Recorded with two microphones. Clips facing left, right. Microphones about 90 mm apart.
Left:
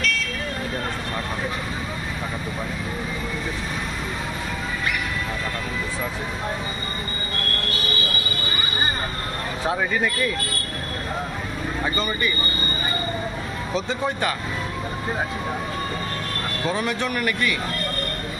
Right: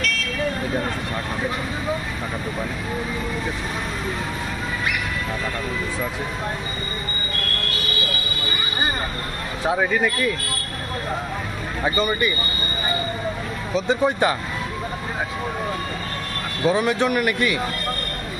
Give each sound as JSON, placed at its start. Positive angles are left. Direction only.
{"t": 9.7, "sound": "speech", "side_deg": -5}
{"t": 11.8, "sound": "speech", "side_deg": -15}
{"t": 13.8, "sound": "speech", "side_deg": -20}
{"t": 16.6, "sound": "speech", "side_deg": -15}